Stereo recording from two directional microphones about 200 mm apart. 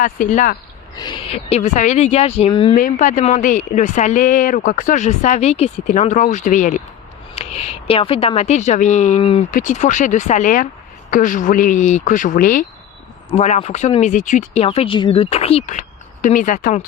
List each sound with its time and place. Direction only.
0.0 s speech: 40° left (ahead or behind)
0.9 s speech: 25° left (ahead or behind)
2.7 s speech: 40° left (ahead or behind)